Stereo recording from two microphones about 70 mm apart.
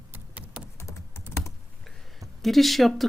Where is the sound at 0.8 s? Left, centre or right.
Left.